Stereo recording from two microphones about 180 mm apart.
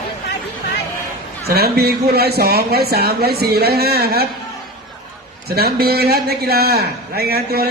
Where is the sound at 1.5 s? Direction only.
60° right (ahead or behind).